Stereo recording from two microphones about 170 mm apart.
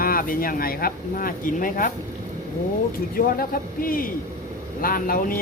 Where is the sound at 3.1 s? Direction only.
60° left (ahead or behind).